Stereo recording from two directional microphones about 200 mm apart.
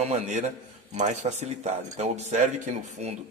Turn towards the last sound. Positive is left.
turn(degrees=-35)  # may be behind; listen again after turning